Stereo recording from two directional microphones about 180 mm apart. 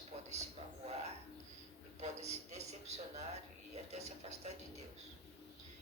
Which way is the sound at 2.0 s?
40° right (ahead or behind).